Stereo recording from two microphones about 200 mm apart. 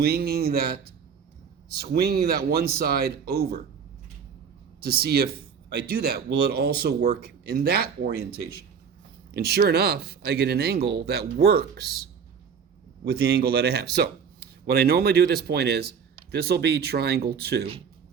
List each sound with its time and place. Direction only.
0.0 s speech: 50° right (ahead or behind)
4.8 s speech: 50° right (ahead or behind)
9.3 s speech: 50° right (ahead or behind)
13.1 s speech: 50° right (ahead or behind)